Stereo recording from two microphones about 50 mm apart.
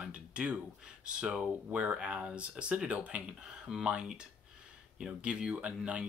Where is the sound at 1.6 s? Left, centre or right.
Right.